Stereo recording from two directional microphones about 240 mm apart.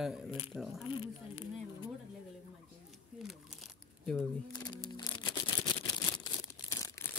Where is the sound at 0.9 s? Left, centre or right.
Left.